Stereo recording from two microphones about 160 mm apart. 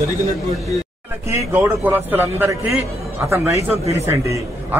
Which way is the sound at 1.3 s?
10° right (ahead or behind).